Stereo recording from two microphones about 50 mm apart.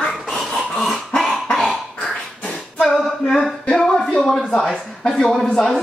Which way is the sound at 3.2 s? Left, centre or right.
Centre.